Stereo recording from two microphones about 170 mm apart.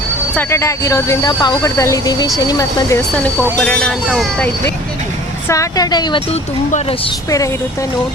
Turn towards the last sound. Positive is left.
turn(degrees=20)  # may be behind; listen again after turning